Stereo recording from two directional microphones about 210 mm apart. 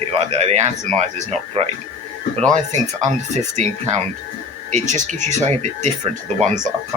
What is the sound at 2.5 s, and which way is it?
Speech, 35° right (ahead or behind).